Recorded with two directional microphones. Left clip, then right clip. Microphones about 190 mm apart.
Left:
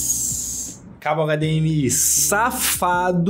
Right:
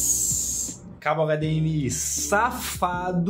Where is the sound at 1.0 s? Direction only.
40° left (ahead or behind).